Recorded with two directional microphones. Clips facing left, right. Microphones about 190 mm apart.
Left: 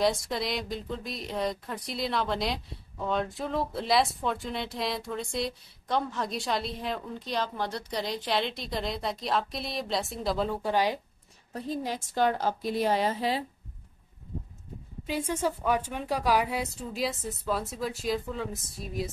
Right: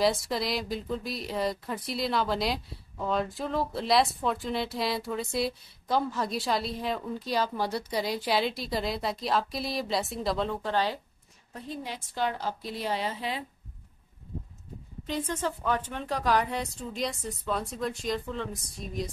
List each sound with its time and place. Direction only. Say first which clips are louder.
0.0 s speech: right 1 dB; centre (ahead or behind)
11.5 s a woman's voice: left 5 dB; 40° left (ahead or behind)
15.0 s speech: left 2 dB; 10° left (ahead or behind)